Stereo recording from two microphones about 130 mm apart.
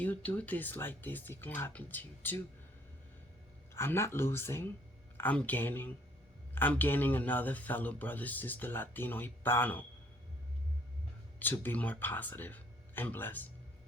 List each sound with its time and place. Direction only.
0.0 s speech: 10° left (ahead or behind)
3.8 s speech: 20° left (ahead or behind)
11.3 s speech: 15° left (ahead or behind)